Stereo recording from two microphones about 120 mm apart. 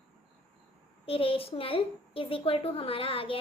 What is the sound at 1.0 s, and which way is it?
A woman's voice, 50° left (ahead or behind).